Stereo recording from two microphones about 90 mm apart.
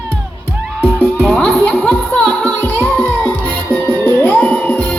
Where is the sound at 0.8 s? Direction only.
15° left (ahead or behind).